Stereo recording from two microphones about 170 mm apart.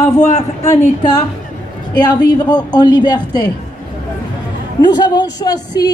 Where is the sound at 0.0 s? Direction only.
45° left (ahead or behind).